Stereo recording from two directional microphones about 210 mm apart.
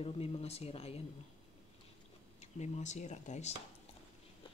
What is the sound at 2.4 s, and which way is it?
Speech, 35° left (ahead or behind).